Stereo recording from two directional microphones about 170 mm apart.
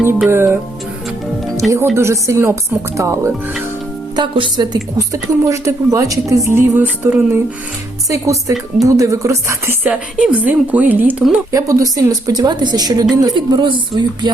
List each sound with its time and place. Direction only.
0.0 s music: 15° right (ahead or behind)
1.6 s speech: centre (ahead or behind)
2.0 s a woman's voice: 15° right (ahead or behind)
4.1 s a woman's voice: 30° right (ahead or behind)